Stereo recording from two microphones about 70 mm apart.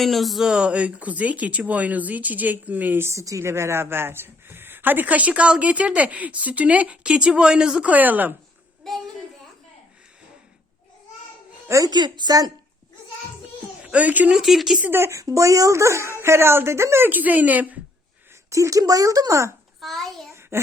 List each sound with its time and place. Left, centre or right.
0.0 s a sound: centre
0.5 s speech: centre
3.1 s speech: right
11.9 s a woman's voice: right
13.8 s speech: right
14.3 s a sound: centre
14.8 s speech: right
17.1 s speech: right
18.5 s speech: right
19.8 s a sound: centre
20.5 s speech: right